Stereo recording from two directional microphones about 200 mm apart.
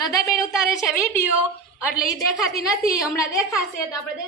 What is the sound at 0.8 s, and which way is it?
Speech, 5° right (ahead or behind).